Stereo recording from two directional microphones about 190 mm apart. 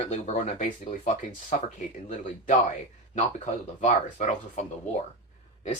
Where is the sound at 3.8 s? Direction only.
35° left (ahead or behind).